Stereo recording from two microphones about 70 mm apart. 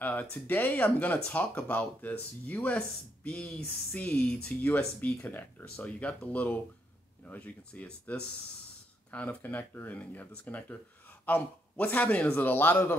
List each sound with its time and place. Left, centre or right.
0.0 s speech: left
5.0 s speech: left